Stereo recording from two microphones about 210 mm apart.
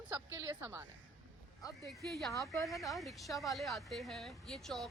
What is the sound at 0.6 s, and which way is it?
Speech, 10° right (ahead or behind).